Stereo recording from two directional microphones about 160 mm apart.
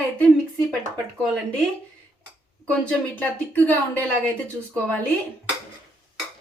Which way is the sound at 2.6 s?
5° left (ahead or behind).